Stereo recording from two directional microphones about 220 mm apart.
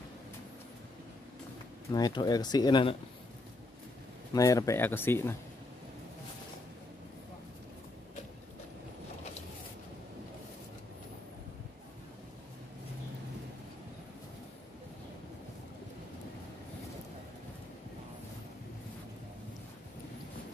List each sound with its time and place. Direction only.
1.9 s speech: 20° left (ahead or behind)
4.3 s speech: 15° left (ahead or behind)